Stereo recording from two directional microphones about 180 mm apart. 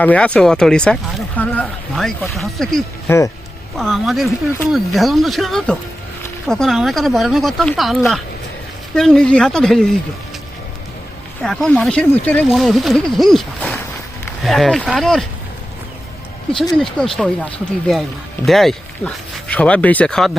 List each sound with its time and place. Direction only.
0.0 s speech: 10° left (ahead or behind)
3.1 s speech: 15° left (ahead or behind)
3.8 s speech: centre (ahead or behind)
11.4 s speech: 5° left (ahead or behind)
13.6 s a sound: 10° left (ahead or behind)
14.4 s speech: centre (ahead or behind)
16.7 s speech: 5° left (ahead or behind)
18.4 s speech: centre (ahead or behind)